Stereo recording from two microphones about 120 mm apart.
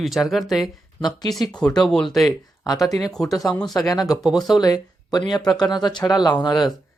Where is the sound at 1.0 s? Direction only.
35° left (ahead or behind).